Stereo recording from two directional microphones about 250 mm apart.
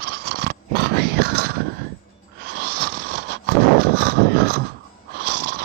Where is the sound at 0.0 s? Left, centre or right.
Right.